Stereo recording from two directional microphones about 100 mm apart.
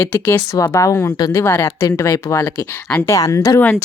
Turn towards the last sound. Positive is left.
turn(degrees=35)  # may be behind; listen again after turning